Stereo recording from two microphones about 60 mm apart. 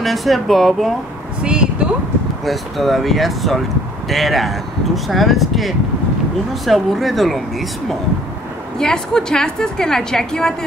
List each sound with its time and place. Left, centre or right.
0.0 s speech: centre
1.4 s a sound: centre
2.4 s speech: centre
8.7 s a woman's voice: centre